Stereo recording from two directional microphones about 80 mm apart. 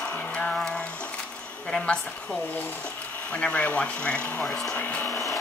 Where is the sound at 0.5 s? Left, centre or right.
Centre.